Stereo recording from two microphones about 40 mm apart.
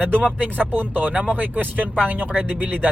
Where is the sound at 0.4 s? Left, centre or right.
Right.